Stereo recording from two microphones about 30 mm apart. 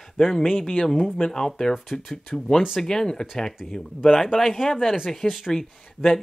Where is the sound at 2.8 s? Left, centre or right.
Centre.